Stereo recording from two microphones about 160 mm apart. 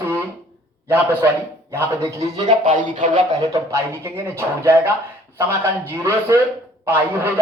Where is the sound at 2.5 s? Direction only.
50° right (ahead or behind).